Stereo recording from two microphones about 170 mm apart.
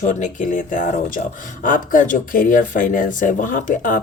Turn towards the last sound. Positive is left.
turn(degrees=50)  # may be behind; listen again after turning